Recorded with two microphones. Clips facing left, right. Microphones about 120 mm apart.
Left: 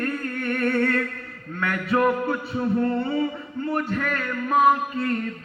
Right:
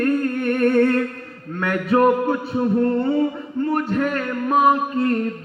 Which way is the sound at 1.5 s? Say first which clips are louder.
Right 5 dB; 50° right (ahead or behind).